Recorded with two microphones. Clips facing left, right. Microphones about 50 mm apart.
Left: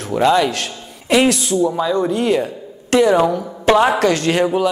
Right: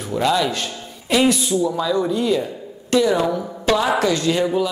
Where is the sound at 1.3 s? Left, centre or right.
Left.